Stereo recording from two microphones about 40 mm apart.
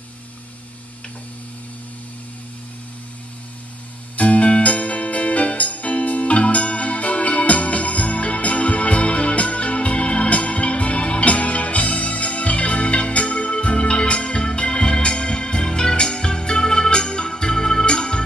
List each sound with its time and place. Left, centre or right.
4.2 s music: left